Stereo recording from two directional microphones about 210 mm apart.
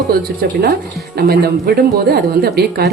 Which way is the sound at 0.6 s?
50° right (ahead or behind).